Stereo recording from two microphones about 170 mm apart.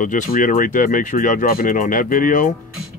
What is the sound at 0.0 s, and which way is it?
Speech, 50° left (ahead or behind).